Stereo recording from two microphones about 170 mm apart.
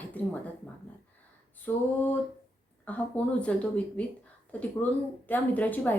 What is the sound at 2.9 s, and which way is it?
Speech, 5° left (ahead or behind).